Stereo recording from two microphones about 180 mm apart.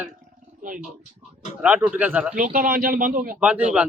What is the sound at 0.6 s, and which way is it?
Speech, 45° right (ahead or behind).